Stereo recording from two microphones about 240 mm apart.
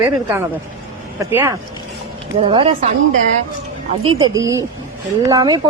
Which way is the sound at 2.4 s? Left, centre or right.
Right.